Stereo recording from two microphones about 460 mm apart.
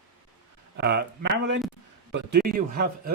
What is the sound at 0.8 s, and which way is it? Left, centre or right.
Speech, right.